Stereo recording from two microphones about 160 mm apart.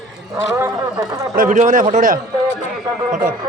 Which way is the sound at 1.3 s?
55° right (ahead or behind).